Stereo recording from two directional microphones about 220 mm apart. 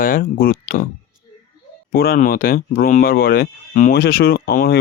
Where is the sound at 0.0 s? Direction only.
40° left (ahead or behind).